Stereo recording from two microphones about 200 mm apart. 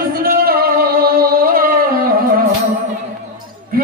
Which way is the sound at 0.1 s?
45° right (ahead or behind).